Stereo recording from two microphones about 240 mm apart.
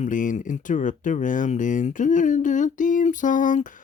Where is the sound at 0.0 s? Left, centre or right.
Left.